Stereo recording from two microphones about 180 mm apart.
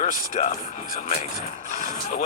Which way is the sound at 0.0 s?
45° left (ahead or behind).